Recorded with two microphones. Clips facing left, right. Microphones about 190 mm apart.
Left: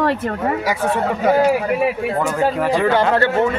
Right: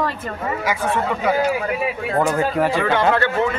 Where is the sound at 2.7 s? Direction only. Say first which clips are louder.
Left 2 dB; 35° left (ahead or behind).